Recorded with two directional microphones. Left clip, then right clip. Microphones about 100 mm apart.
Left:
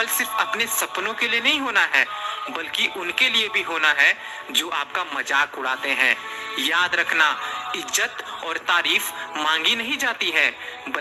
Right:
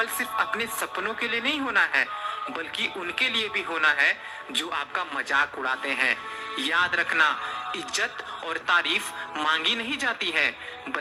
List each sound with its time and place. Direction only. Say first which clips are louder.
0.0 s speech: left 4 dB; 30° left (ahead or behind)